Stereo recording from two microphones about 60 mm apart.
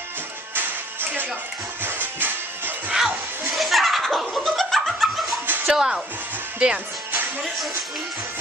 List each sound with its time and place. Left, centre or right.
0.6 s music: right
2.9 s music: centre
3.5 s laughter: centre
5.7 s speech: centre